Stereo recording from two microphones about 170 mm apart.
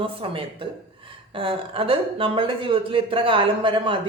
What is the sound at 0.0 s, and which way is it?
A man's voice, 30° right (ahead or behind).